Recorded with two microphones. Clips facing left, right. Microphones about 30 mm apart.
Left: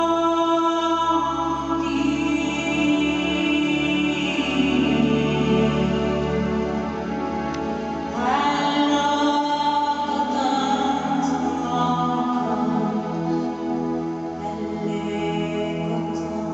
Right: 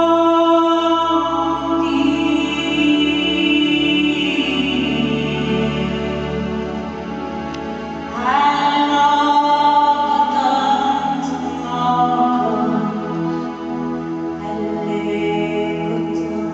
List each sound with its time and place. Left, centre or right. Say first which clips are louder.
0.0 s music: right 7 dB; right
8.3 s music: right 7 dB; centre